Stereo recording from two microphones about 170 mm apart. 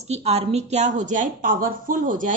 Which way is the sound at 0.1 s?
40° right (ahead or behind).